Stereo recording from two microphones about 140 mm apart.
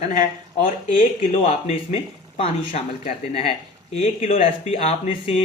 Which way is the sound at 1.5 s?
50° left (ahead or behind).